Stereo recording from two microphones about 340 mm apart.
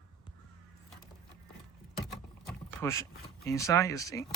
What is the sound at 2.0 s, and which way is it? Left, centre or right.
Speech, centre.